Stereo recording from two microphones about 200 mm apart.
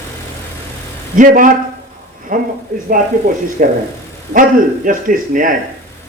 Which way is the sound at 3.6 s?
45° right (ahead or behind).